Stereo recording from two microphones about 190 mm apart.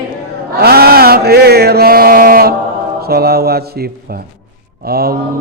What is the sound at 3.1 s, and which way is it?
Mantra, 55° right (ahead or behind).